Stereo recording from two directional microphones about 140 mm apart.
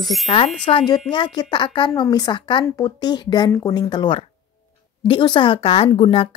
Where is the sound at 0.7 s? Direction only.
35° left (ahead or behind).